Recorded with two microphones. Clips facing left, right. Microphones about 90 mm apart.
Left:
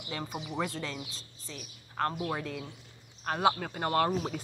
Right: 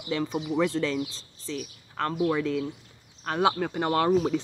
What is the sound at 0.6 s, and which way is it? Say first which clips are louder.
A man's voice: right 10 dB; 90° right.